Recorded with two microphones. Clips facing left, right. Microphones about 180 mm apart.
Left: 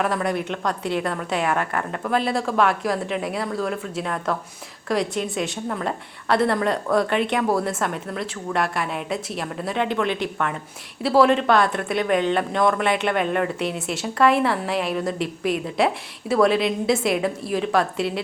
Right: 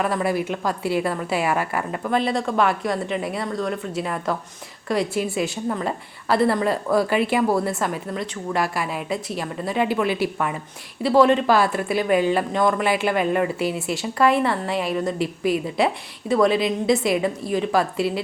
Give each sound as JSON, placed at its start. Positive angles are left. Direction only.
{"t": 0.0, "sound": "a woman's voice", "side_deg": 0}